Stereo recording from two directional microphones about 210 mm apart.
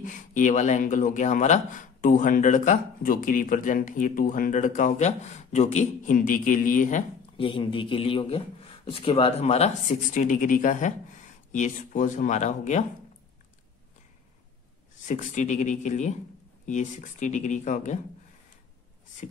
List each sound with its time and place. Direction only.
0.0 s speech: 35° left (ahead or behind)
15.0 s speech: 35° left (ahead or behind)